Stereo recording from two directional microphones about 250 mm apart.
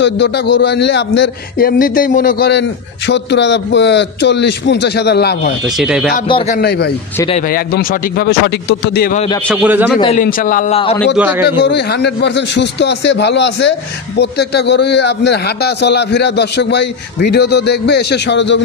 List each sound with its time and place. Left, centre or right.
0.0 s a man's voice: left
5.7 s speech: centre
6.2 s a man's voice: left
6.5 s a man's voice: left
9.5 s speech: centre
10.1 s a man's voice: left
11.1 s a man's voice: centre
11.4 s a man's voice: left